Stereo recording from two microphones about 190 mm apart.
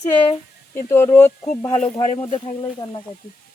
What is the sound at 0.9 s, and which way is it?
Speech, 10° left (ahead or behind).